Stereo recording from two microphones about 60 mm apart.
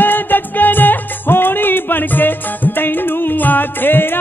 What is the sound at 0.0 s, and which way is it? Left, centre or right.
Music, left.